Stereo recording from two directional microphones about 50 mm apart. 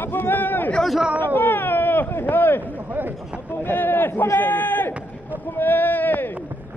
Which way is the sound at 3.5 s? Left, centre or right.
Left.